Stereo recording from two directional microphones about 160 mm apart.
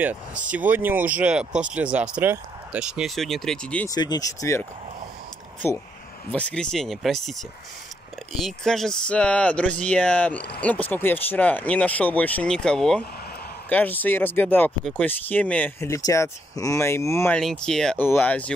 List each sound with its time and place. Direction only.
0.4 s speech: 10° right (ahead or behind)
3.8 s speech: 25° left (ahead or behind)
17.4 s speech: 5° left (ahead or behind)